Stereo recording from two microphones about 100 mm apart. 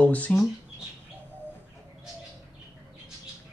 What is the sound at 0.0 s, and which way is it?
Speech, 15° left (ahead or behind).